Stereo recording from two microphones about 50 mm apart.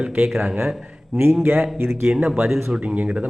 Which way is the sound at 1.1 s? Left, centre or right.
Right.